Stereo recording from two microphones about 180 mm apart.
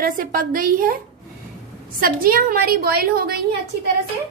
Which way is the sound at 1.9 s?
55° right (ahead or behind).